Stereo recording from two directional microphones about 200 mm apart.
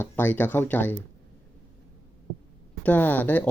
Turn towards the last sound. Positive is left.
turn(degrees=10)  # may be behind; listen again after turning